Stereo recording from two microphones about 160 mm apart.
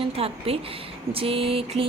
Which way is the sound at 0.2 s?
35° right (ahead or behind).